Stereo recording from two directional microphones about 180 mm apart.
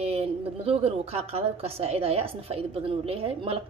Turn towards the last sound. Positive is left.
turn(degrees=-30)  # may be behind; listen again after turning